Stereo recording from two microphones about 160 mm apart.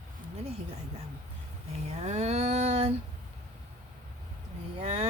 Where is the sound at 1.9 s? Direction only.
45° right (ahead or behind).